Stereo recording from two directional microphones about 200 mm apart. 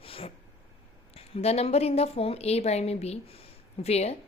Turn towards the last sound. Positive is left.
turn(degrees=30)  # may be behind; listen again after turning